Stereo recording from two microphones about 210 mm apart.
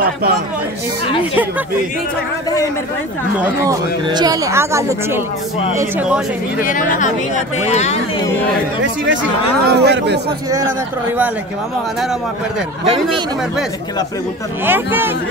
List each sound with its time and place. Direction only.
3.3 s a woman's voice: 5° right (ahead or behind)
4.1 s a woman's voice: 20° right (ahead or behind)
6.6 s speech: 40° left (ahead or behind)
9.0 s speech: 60° right (ahead or behind)
14.7 s a woman's voice: 10° right (ahead or behind)